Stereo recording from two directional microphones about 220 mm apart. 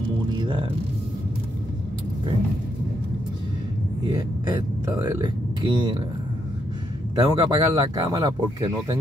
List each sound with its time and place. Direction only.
0.4 s speech: 20° right (ahead or behind)
4.1 s speech: 20° right (ahead or behind)
7.2 s speech: 20° right (ahead or behind)